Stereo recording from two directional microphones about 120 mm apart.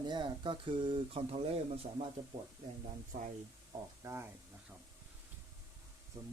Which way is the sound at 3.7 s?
35° right (ahead or behind).